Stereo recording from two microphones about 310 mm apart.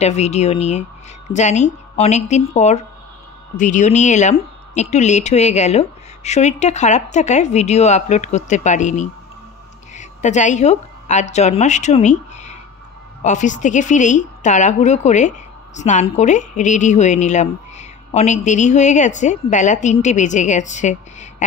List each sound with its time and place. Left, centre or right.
0.0 s a woman's voice: left